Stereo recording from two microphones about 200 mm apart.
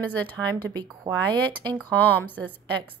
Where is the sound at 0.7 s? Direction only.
20° right (ahead or behind).